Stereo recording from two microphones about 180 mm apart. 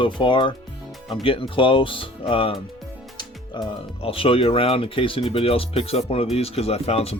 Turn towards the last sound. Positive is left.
turn(degrees=35)  # may be behind; listen again after turning